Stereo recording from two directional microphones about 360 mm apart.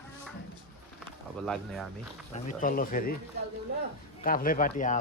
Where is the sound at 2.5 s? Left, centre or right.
Left.